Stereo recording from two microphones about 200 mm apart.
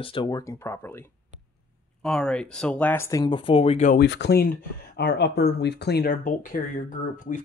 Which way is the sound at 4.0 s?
60° left (ahead or behind).